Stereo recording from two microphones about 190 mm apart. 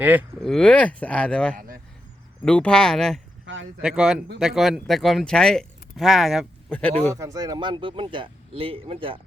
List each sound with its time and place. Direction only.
0.0 s speech: 10° right (ahead or behind)
0.3 s speech: centre (ahead or behind)
1.5 s vehicle: 50° right (ahead or behind)
2.4 s speech: 5° left (ahead or behind)
3.4 s a sound: 75° right (ahead or behind)
3.8 s speech: 5° right (ahead or behind)
7.1 s speech: 15° right (ahead or behind)